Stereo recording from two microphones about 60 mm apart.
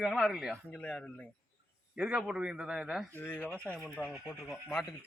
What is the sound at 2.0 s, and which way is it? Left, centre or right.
A man's voice, centre.